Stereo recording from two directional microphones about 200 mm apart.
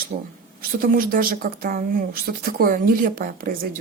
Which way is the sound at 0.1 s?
35° right (ahead or behind).